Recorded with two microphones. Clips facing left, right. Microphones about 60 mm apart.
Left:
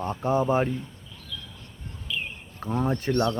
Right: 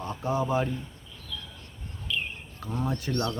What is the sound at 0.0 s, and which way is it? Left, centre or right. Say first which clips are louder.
Speech: left 4 dB; left.